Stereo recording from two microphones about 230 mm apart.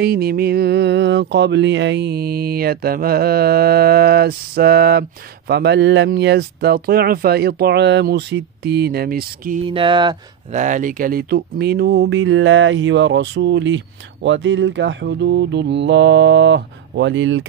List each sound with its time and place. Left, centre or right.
0.0 s speech: right
9.7 s speech: right
10.5 s speech: right